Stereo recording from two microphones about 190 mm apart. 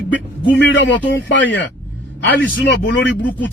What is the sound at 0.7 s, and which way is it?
Speech, 70° left (ahead or behind).